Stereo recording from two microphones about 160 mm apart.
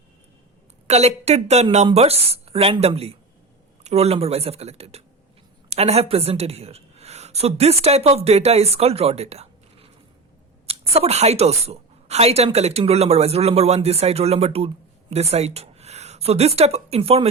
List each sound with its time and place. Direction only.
0.9 s a woman's voice: 40° right (ahead or behind)